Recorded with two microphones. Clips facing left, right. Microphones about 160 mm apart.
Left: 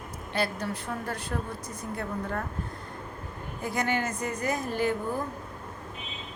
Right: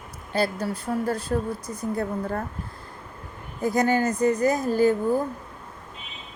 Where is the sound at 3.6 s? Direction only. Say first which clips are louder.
Right 7 dB; 40° right (ahead or behind).